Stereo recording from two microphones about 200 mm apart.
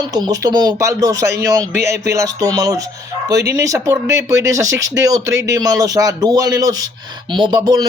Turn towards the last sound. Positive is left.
turn(degrees=-20)  # may be behind; listen again after turning